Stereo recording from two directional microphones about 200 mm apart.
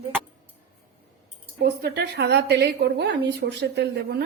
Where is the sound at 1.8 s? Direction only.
55° right (ahead or behind).